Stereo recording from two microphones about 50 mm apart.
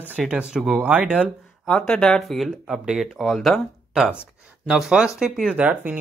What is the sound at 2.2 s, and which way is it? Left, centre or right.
Speech, centre.